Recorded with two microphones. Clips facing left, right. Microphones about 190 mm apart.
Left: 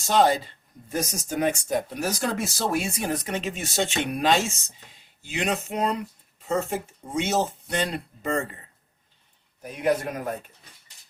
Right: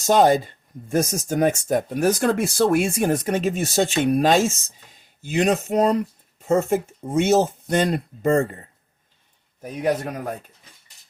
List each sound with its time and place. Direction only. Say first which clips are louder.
0.1 s speech: right 5 dB; 50° right (ahead or behind)